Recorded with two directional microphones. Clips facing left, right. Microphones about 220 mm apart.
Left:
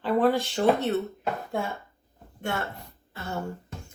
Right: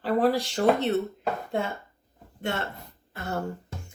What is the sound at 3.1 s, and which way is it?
Throat clearing, 40° right (ahead or behind).